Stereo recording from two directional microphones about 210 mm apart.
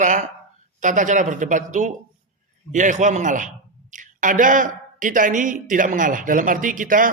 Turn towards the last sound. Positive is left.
turn(degrees=-40)  # may be behind; listen again after turning